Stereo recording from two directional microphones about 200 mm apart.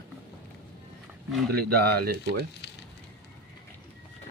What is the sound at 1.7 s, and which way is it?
Speech, 50° right (ahead or behind).